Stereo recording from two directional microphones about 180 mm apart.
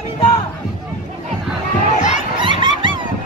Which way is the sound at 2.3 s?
25° right (ahead or behind).